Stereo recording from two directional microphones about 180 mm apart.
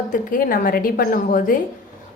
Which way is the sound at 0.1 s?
50° left (ahead or behind).